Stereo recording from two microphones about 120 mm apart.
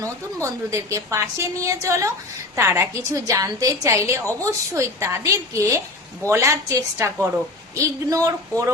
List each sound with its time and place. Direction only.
0.4 s a woman's voice: 25° right (ahead or behind)